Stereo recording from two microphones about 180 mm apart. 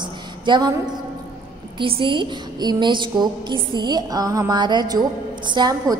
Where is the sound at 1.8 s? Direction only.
30° right (ahead or behind).